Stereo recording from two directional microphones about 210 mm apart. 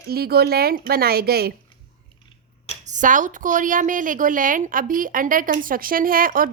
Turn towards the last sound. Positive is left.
turn(degrees=-40)  # may be behind; listen again after turning